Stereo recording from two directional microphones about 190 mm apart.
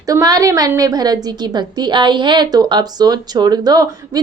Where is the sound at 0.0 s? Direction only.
20° right (ahead or behind).